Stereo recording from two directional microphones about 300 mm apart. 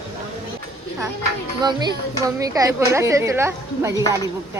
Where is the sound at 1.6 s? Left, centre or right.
Centre.